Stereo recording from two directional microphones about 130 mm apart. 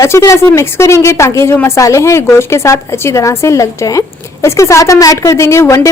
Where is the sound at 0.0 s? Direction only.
25° left (ahead or behind).